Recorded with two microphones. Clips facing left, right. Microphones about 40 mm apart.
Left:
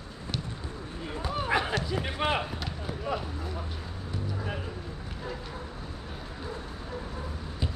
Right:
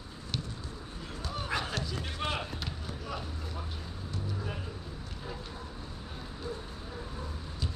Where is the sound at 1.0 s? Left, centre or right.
Left.